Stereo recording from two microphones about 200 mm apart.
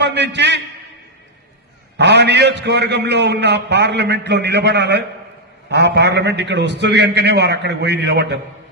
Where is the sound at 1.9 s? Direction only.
60° right (ahead or behind).